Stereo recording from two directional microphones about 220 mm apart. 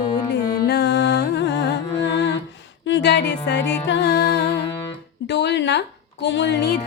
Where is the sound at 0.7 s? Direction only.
50° left (ahead or behind).